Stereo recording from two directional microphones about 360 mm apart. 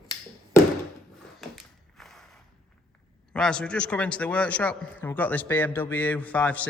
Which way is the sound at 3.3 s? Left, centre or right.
Centre.